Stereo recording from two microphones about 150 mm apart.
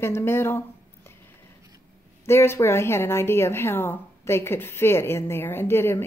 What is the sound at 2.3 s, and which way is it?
A woman's voice, 15° left (ahead or behind).